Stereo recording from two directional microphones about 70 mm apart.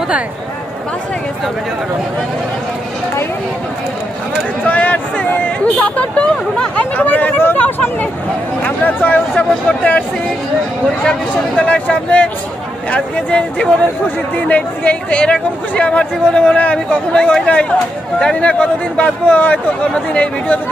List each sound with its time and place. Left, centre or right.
4.6 s a man's voice: left
11.0 s a man's voice: centre